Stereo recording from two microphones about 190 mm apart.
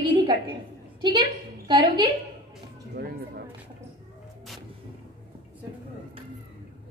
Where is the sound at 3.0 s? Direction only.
55° right (ahead or behind).